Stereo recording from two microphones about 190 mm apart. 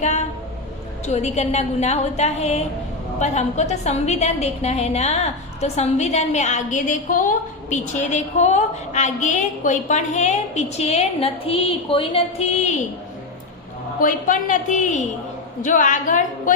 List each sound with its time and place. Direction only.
0.0 s a sound: 40° left (ahead or behind)
1.0 s a woman's voice: 35° left (ahead or behind)
14.0 s a woman's voice: 45° left (ahead or behind)